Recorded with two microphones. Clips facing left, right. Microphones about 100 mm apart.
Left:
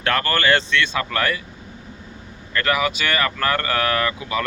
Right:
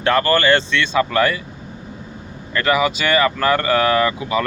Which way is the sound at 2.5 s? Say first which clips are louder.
Right 4 dB; 10° right (ahead or behind).